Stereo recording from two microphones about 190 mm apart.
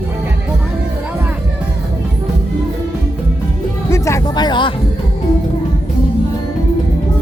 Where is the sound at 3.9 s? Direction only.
15° left (ahead or behind).